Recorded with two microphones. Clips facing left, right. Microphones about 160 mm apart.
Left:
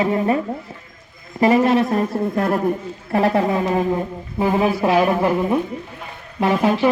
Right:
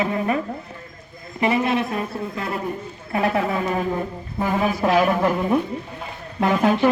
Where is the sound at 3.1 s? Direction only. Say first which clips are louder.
Left 4 dB; 35° left (ahead or behind).